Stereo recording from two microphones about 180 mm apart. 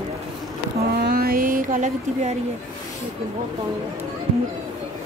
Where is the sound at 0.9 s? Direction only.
60° right (ahead or behind).